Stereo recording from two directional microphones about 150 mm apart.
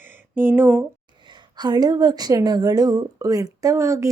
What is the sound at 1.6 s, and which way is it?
Speech, 30° right (ahead or behind).